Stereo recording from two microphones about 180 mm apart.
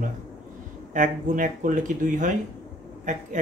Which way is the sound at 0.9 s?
45° right (ahead or behind).